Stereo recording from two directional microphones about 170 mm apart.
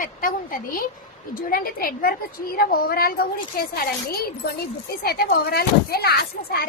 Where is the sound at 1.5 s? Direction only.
60° left (ahead or behind).